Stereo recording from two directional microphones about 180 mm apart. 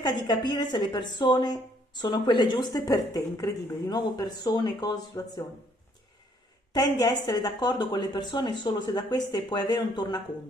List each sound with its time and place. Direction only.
0.0 s a woman's voice: 20° left (ahead or behind)
6.7 s a woman's voice: 20° left (ahead or behind)